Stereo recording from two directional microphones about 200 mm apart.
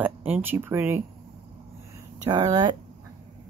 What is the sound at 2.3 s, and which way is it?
Speech, 20° right (ahead or behind).